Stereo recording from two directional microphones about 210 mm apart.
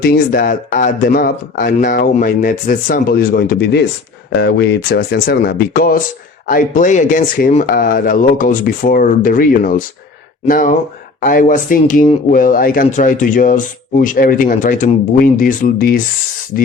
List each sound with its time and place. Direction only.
0.0 s speech: 45° left (ahead or behind)